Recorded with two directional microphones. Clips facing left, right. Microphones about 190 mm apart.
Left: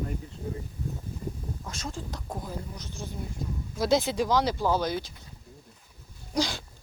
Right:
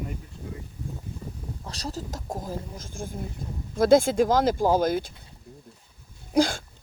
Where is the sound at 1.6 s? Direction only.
35° right (ahead or behind); by 5.1 s 50° right (ahead or behind).